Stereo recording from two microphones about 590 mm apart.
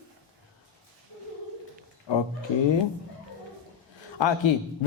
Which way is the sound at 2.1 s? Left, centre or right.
Left.